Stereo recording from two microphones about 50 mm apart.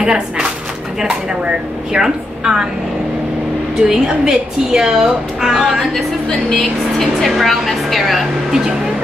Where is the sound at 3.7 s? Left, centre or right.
Centre.